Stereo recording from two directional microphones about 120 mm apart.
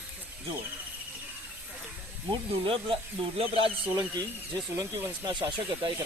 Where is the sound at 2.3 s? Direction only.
50° right (ahead or behind).